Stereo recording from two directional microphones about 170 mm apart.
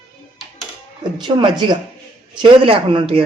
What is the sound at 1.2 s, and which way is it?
Speech, 25° right (ahead or behind).